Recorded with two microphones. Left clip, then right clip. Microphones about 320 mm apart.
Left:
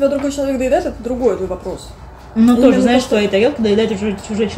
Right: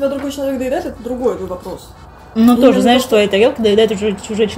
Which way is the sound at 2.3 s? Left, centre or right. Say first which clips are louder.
Right 1 dB; right.